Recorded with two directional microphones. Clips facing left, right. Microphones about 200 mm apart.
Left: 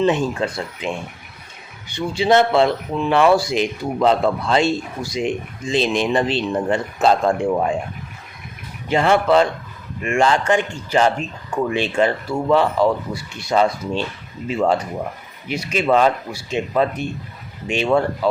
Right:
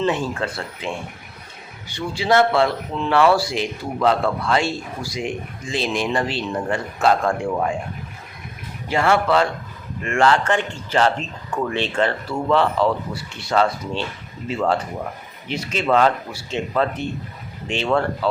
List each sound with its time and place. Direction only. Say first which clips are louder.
0.0 s speech: left 4 dB; 20° left (ahead or behind)
8.9 s speech: left 3 dB; 20° left (ahead or behind)